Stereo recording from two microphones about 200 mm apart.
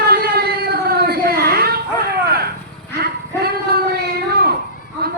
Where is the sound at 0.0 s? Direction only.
50° right (ahead or behind).